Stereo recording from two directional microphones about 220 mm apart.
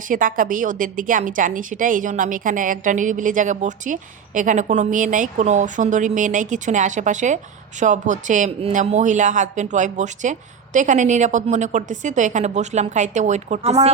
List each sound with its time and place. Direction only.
0.1 s a woman's voice: 40° right (ahead or behind)